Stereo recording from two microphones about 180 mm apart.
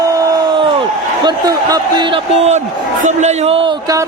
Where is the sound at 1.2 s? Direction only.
20° right (ahead or behind).